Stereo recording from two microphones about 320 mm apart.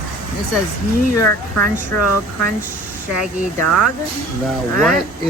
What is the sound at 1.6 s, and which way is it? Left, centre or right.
Speech, left.